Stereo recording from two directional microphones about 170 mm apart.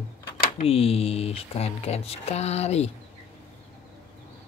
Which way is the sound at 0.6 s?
35° left (ahead or behind).